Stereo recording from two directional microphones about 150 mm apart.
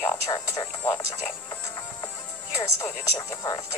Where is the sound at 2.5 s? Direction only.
20° left (ahead or behind).